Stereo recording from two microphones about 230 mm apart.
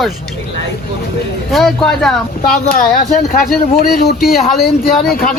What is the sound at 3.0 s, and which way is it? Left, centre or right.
Speech, left.